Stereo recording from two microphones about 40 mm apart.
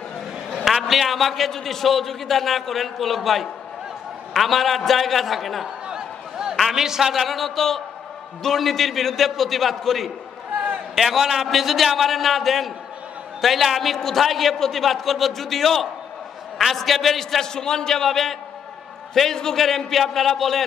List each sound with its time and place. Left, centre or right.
0.8 s a man's voice: centre
5.9 s a sound: centre
6.7 s a man's voice: centre
17.2 s a man's voice: centre